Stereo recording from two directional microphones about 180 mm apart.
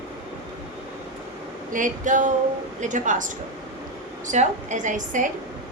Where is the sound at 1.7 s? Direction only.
45° right (ahead or behind).